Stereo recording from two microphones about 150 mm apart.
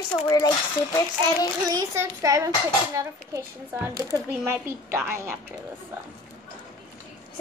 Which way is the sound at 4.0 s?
20° right (ahead or behind).